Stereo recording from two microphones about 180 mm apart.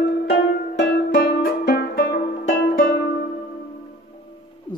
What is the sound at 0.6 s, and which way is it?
Music, 60° left (ahead or behind).